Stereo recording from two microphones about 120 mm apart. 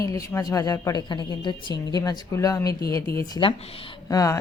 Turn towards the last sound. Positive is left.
turn(degrees=30)  # may be behind; listen again after turning